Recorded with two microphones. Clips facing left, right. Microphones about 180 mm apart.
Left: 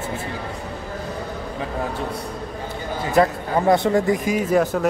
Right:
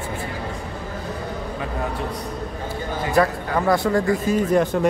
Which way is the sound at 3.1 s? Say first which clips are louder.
Left 2 dB; 20° left (ahead or behind).